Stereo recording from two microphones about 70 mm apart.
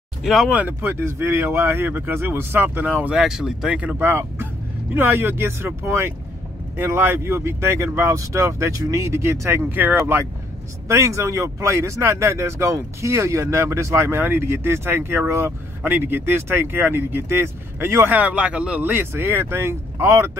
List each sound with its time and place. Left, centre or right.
0.2 s speech: centre
0.5 s speech: right
0.7 s speech: right
3.2 s speech: centre
3.8 s speech: right
10.9 s speech: right
15.8 s speech: right
18.0 s speech: right
18.8 s speech: right